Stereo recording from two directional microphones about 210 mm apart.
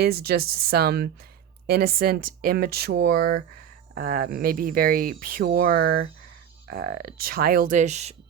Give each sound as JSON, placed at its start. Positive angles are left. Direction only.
{"t": 0.0, "sound": "speech", "side_deg": -50}